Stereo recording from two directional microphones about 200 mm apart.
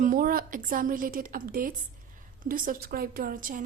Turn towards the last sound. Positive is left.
turn(degrees=-45)  # may be behind; listen again after turning